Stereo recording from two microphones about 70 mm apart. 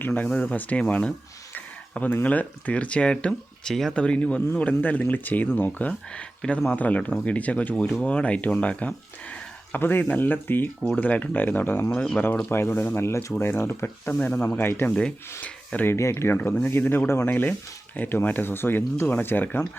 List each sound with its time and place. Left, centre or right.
0.0 s speech: left
2.2 s speech: left
5.9 s speech: centre
9.7 s speech: left
11.9 s speech: centre
12.5 s speech: left
15.9 s speech: left